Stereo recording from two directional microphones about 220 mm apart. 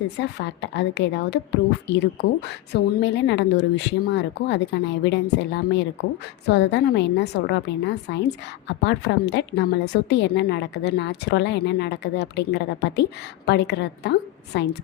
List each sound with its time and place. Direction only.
0.2 s a woman's voice: 50° left (ahead or behind)